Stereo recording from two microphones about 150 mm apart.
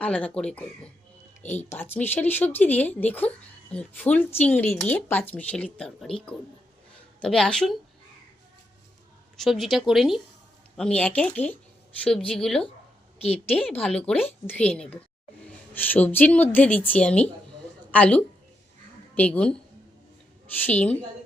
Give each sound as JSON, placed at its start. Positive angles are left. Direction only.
{"t": 0.0, "sound": "speech", "side_deg": 10}
{"t": 1.4, "sound": "speech", "side_deg": 50}
{"t": 1.7, "sound": "speech", "side_deg": 15}
{"t": 9.4, "sound": "speech", "side_deg": 0}
{"t": 13.2, "sound": "a woman's voice", "side_deg": 45}
{"t": 13.7, "sound": "speech", "side_deg": 10}
{"t": 20.7, "sound": "speech", "side_deg": 10}